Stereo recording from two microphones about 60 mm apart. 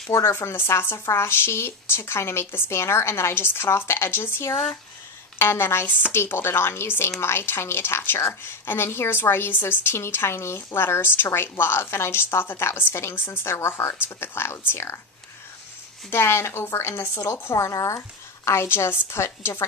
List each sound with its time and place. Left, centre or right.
0.3 s a woman's voice: left
16.1 s speech: left